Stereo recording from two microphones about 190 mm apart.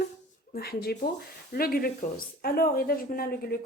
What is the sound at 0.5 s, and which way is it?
A woman's voice, 55° left (ahead or behind).